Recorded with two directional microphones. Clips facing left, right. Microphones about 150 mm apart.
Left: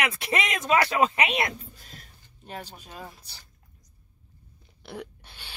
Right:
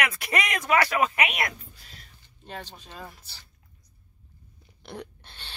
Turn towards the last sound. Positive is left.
turn(degrees=10)  # may be behind; listen again after turning